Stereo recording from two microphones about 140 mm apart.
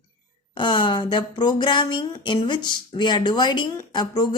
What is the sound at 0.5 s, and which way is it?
Speech, 35° left (ahead or behind).